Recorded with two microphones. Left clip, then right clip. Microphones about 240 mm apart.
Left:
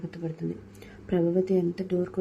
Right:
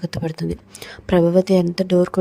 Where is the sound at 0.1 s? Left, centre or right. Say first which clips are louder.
Right 9 dB; right.